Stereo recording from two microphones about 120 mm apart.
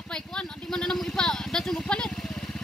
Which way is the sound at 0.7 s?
5° left (ahead or behind).